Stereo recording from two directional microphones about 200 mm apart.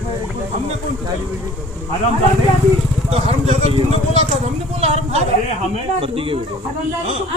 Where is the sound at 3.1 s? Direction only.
30° right (ahead or behind).